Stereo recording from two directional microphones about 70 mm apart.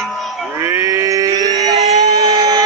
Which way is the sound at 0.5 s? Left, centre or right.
Right.